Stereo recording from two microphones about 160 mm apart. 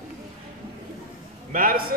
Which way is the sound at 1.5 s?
65° right (ahead or behind).